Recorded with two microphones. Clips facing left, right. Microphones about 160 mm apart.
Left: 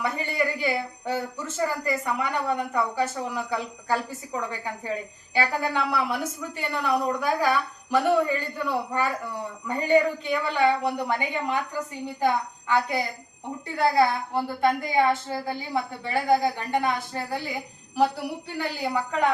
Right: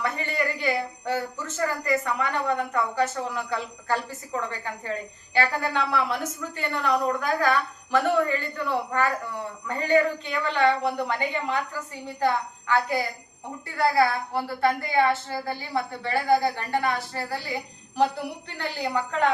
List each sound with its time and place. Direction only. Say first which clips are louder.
0.0 s a woman's voice: left 1 dB; 10° left (ahead or behind)
17.9 s a woman's voice: left 1 dB; 5° left (ahead or behind)